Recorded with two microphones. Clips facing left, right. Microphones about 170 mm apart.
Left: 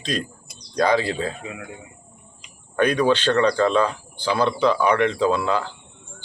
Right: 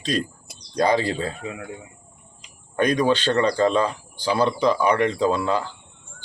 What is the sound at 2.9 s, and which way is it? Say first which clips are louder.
Speech: left 1 dB; 10° right (ahead or behind).